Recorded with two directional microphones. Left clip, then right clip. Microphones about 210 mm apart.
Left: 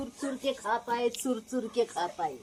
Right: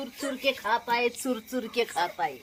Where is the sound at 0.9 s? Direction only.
5° right (ahead or behind).